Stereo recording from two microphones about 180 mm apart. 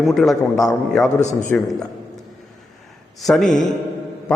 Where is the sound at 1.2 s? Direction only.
40° left (ahead or behind).